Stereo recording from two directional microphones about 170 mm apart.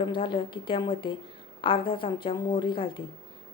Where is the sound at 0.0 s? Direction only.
30° left (ahead or behind).